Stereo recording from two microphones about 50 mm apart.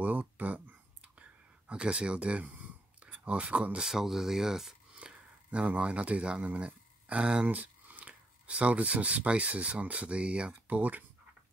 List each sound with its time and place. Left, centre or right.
0.0 s a sound: right
1.7 s speech: right
3.8 s speech: centre
4.9 s speech: right
7.4 s speech: right
10.8 s speech: right